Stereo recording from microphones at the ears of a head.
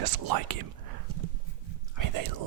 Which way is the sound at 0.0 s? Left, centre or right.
Right.